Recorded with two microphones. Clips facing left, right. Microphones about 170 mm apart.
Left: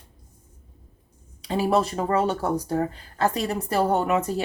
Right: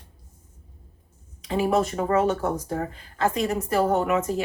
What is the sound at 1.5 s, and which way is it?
Speech, 35° left (ahead or behind).